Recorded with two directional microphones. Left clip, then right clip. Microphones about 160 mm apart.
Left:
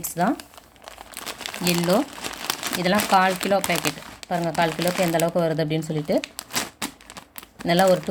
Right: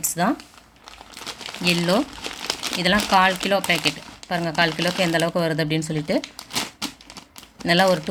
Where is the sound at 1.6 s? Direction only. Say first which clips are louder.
Right 1 dB; 5° left (ahead or behind).